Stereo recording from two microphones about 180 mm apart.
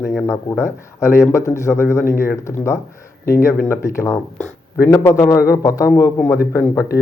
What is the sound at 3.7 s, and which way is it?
A man's voice, 15° left (ahead or behind).